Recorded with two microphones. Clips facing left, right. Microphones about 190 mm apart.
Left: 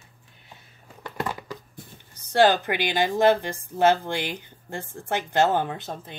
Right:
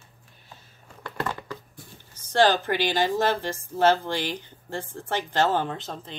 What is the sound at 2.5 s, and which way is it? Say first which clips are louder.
Speech: even; 55° left (ahead or behind).